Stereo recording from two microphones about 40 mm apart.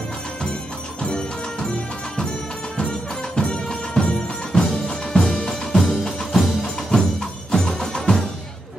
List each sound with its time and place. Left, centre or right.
1.0 s music: left
3.3 s music: left
6.0 s music: centre
6.6 s music: centre